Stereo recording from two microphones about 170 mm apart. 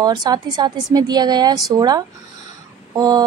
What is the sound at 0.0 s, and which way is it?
A woman's voice, 25° right (ahead or behind).